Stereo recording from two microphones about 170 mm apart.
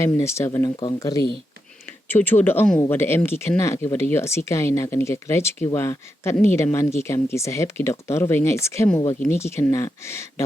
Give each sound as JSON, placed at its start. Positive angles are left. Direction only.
{"t": 0.0, "sound": "speech", "side_deg": 15}
{"t": 2.0, "sound": "speech", "side_deg": 10}